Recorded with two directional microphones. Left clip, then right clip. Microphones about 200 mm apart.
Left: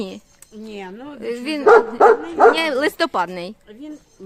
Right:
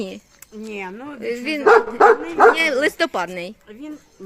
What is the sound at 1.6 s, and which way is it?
Speech, 40° right (ahead or behind).